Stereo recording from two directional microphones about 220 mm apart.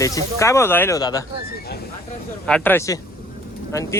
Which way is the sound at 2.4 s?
5° left (ahead or behind).